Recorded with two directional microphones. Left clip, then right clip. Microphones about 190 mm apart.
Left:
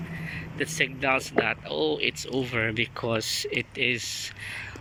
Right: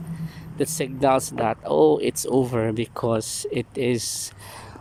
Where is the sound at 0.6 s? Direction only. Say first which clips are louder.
Right 4 dB; 25° right (ahead or behind).